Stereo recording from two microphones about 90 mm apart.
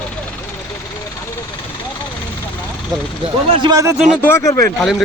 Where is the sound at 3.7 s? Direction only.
35° right (ahead or behind).